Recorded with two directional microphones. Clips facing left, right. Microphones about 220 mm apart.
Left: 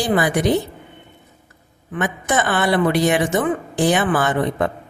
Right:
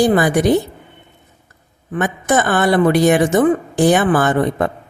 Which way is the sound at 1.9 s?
45° right (ahead or behind).